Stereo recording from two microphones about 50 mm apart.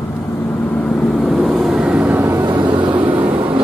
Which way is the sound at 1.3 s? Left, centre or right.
Centre.